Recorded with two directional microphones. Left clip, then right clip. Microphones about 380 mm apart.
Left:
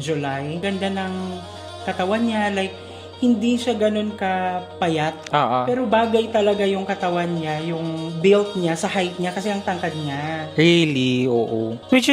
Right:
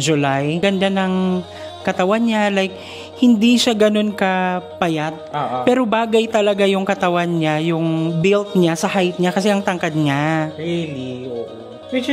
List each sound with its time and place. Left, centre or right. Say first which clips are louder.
0.0 s a man's voice: right 7 dB; right
5.3 s speech: left 4 dB; left
5.7 s a man's voice: right 3 dB; right
10.6 s mantra: left 7 dB; left